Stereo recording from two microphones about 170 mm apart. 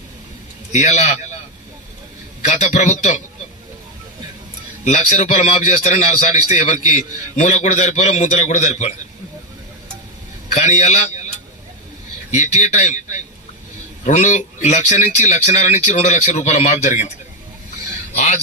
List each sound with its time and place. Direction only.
0.7 s a man's voice: 45° left (ahead or behind)
2.4 s a man's voice: 40° left (ahead or behind)
4.9 s a man's voice: 45° left (ahead or behind)
10.5 s a man's voice: 40° left (ahead or behind)
12.3 s a man's voice: 45° left (ahead or behind)